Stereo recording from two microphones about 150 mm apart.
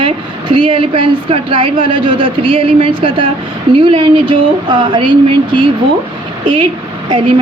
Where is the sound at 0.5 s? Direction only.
35° right (ahead or behind).